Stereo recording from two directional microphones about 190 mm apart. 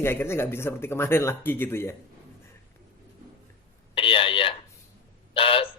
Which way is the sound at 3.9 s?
30° left (ahead or behind).